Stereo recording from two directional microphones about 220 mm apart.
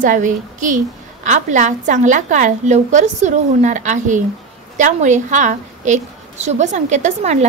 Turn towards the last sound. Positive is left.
turn(degrees=-30)  # may be behind; listen again after turning